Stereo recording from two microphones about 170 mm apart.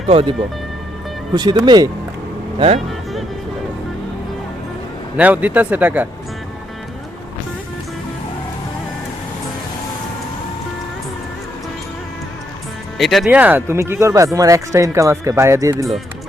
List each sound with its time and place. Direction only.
0.1 s speech: 35° right (ahead or behind)
1.3 s speech: 25° right (ahead or behind)
2.6 s speech: 40° right (ahead or behind)
5.1 s speech: 10° right (ahead or behind)
13.0 s speech: centre (ahead or behind)
13.2 s speech: 10° right (ahead or behind)